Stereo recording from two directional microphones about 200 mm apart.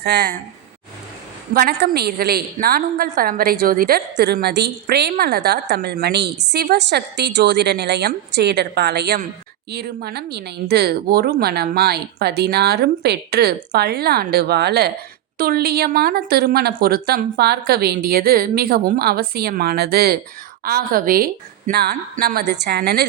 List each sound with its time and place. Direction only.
0.0 s speech: 55° right (ahead or behind)
1.5 s a woman's voice: 50° right (ahead or behind)